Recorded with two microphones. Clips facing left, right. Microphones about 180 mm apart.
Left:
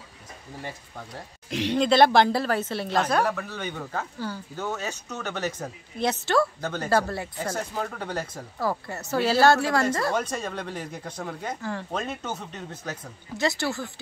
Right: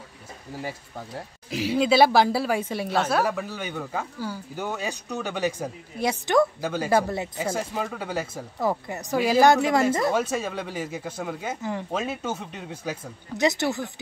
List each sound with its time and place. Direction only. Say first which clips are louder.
0.6 s speech: right 4 dB; 5° right (ahead or behind)
8.5 s speech: right 2 dB; 20° right (ahead or behind)
10.1 s speech: right 3 dB; 5° right (ahead or behind)